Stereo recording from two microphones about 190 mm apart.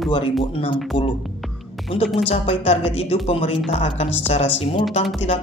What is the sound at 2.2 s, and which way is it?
Music, 35° left (ahead or behind).